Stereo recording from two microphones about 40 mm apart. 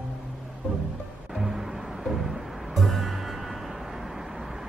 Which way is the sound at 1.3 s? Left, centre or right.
Centre.